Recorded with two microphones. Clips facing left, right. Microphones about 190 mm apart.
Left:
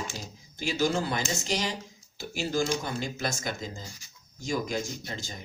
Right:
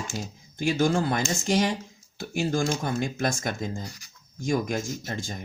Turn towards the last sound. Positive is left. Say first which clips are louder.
# right 5 dB
turn(degrees=-50)  # may be behind; listen again after turning